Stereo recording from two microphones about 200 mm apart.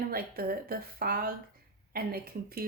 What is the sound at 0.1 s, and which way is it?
Speech, 50° right (ahead or behind).